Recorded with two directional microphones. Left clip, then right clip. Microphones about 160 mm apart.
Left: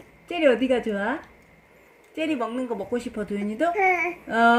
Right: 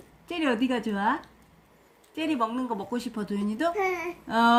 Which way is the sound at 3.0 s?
20° right (ahead or behind).